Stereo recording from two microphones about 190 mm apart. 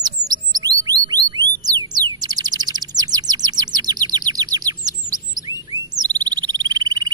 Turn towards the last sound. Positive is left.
turn(degrees=-20)  # may be behind; listen again after turning